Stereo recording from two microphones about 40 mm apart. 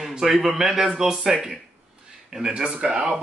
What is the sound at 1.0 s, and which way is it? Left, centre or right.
Speech, centre.